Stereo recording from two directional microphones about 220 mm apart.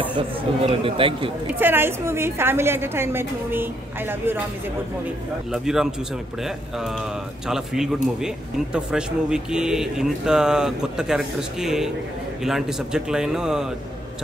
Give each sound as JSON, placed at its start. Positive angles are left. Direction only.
{"t": 0.1, "sound": "speech", "side_deg": -25}
{"t": 1.5, "sound": "a woman's voice", "side_deg": -10}
{"t": 5.5, "sound": "a man's voice", "side_deg": 0}